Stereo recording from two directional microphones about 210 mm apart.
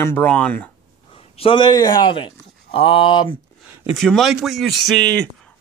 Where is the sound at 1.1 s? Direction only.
25° left (ahead or behind).